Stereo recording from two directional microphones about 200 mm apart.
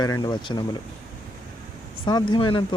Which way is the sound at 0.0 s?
20° left (ahead or behind).